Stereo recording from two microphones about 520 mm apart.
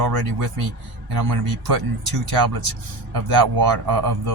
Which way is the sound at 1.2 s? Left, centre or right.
Right.